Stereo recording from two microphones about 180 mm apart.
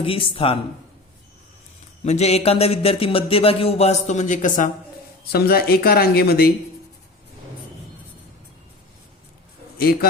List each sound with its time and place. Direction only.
0.0 s speech: 30° left (ahead or behind)
2.0 s speech: 35° left (ahead or behind)
5.3 s speech: 60° left (ahead or behind)
9.7 s speech: 60° left (ahead or behind)